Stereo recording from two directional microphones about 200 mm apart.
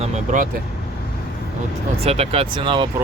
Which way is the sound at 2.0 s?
30° right (ahead or behind).